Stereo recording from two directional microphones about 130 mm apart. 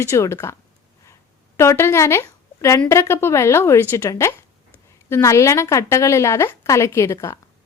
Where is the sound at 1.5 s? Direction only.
20° left (ahead or behind).